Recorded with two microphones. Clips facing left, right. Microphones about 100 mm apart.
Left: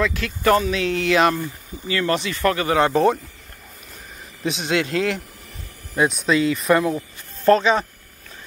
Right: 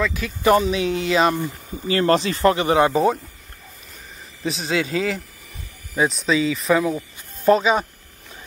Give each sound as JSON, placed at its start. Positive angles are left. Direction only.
{"t": 0.0, "sound": "speech", "side_deg": -5}
{"t": 0.4, "sound": "speech", "side_deg": -15}
{"t": 1.9, "sound": "speech", "side_deg": -35}
{"t": 2.9, "sound": "speech", "side_deg": -5}
{"t": 4.4, "sound": "speech", "side_deg": 0}
{"t": 7.0, "sound": "speech", "side_deg": -10}